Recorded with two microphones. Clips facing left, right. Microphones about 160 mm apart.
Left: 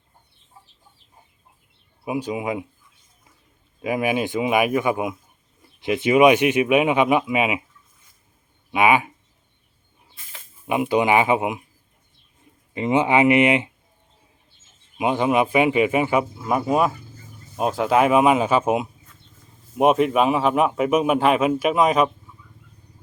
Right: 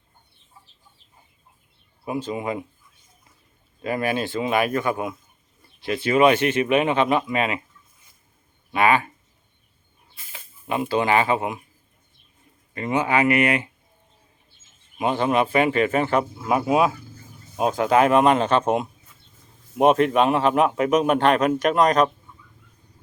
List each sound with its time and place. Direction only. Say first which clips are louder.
2.0 s speech: left 2 dB; 10° left (ahead or behind)
3.8 s speech: left 2 dB; 15° left (ahead or behind)
8.7 s speech: left 1 dB; 15° left (ahead or behind)
10.7 s speech: left 2 dB; 15° left (ahead or behind)
12.7 s speech: left 3 dB; 20° left (ahead or behind)
14.9 s speech: left 1 dB; 15° left (ahead or behind)
16.4 s a man's voice: right 3 dB; 5° right (ahead or behind)